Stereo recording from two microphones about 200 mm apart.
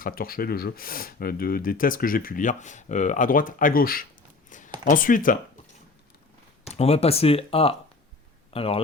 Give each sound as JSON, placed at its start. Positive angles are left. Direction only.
{"t": 0.0, "sound": "speech", "side_deg": 45}
{"t": 4.4, "sound": "a sound", "side_deg": 40}
{"t": 4.9, "sound": "speech", "side_deg": 45}
{"t": 6.7, "sound": "speech", "side_deg": 30}